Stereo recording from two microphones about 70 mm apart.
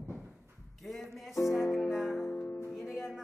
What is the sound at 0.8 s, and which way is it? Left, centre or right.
Music, centre.